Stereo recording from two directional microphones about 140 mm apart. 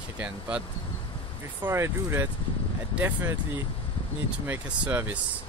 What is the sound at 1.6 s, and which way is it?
Speech, 20° right (ahead or behind).